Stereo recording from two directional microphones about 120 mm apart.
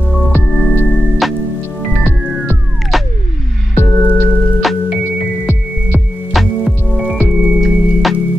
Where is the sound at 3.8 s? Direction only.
15° left (ahead or behind).